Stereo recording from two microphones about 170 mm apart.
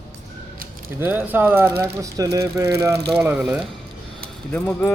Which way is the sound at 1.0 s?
10° right (ahead or behind).